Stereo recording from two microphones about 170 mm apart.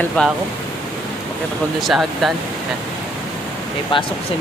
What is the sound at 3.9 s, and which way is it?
Speech, 30° left (ahead or behind).